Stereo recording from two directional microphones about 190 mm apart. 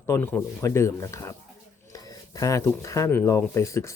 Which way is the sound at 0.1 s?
10° left (ahead or behind).